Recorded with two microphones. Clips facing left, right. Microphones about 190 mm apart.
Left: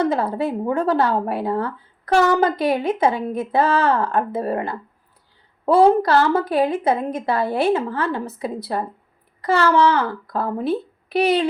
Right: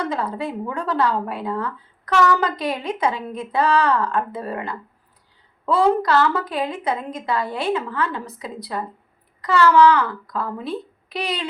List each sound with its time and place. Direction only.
0.0 s speech: 25° left (ahead or behind)
5.8 s speech: 30° left (ahead or behind)
8.7 s speech: 40° left (ahead or behind)
9.4 s speech: 25° left (ahead or behind)